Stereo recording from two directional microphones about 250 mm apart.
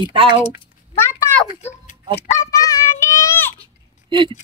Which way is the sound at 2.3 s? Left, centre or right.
Centre.